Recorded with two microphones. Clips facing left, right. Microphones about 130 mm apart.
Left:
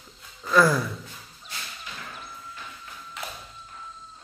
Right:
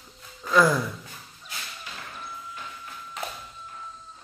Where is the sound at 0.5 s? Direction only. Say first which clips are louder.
Even; 20° right (ahead or behind).